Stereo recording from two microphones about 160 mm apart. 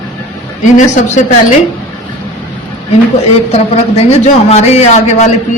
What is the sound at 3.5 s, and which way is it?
Speech, 40° left (ahead or behind).